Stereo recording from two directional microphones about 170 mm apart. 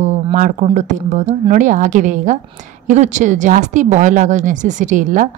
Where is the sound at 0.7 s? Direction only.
45° right (ahead or behind).